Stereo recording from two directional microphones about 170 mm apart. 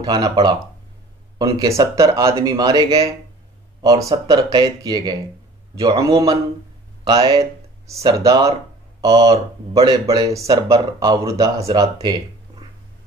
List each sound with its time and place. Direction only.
0.0 s speech: 25° right (ahead or behind)